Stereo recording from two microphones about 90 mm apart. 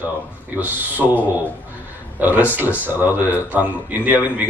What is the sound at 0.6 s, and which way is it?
A man's voice, 20° right (ahead or behind).